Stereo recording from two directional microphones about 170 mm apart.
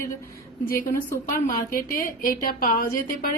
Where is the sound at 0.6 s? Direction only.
55° left (ahead or behind).